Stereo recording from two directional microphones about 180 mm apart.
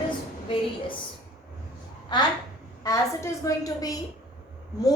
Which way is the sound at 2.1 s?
25° left (ahead or behind).